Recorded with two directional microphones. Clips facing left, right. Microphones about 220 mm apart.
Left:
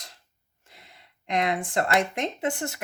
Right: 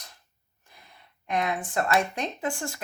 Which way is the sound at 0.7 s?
80° left.